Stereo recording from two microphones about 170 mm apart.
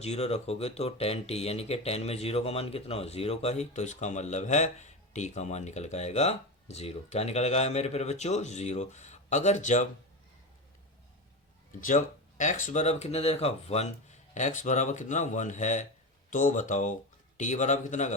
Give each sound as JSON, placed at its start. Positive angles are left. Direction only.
{"t": 0.0, "sound": "speech", "side_deg": 40}
{"t": 11.8, "sound": "speech", "side_deg": 50}